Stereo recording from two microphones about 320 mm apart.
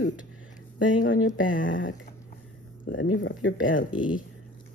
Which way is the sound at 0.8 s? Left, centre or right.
Left.